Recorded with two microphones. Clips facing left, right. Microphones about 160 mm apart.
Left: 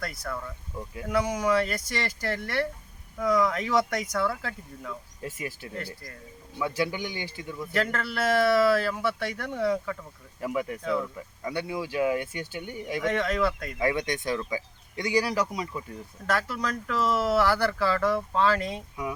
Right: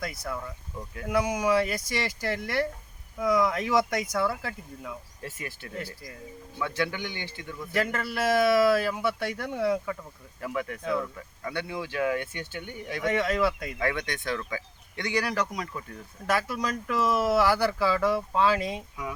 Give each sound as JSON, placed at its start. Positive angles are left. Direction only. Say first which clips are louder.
{"t": 0.0, "sound": "speech", "louder": "even", "side_deg": -10}
{"t": 5.2, "sound": "speech", "louder": "left 4 dB", "side_deg": 15}
{"t": 5.7, "sound": "speech", "louder": "even", "side_deg": -10}
{"t": 6.6, "sound": "speech", "louder": "left 2 dB", "side_deg": 10}
{"t": 7.7, "sound": "speech", "louder": "even", "side_deg": -10}
{"t": 10.4, "sound": "speech", "louder": "left 2 dB", "side_deg": 15}
{"t": 13.1, "sound": "speech", "louder": "right 1 dB", "side_deg": -10}
{"t": 13.7, "sound": "speech", "louder": "left 3 dB", "side_deg": 20}
{"t": 16.2, "sound": "speech", "louder": "right 1 dB", "side_deg": -10}